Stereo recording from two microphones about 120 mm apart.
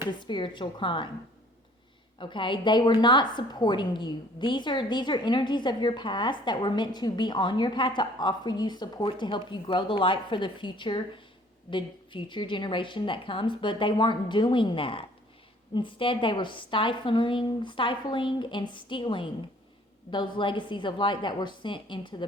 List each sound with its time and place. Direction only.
0.2 s a woman's voice: 40° left (ahead or behind)
2.1 s a woman's voice: 45° left (ahead or behind)